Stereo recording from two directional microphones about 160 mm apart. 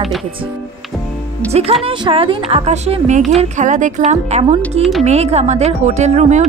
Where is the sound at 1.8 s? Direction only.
30° right (ahead or behind).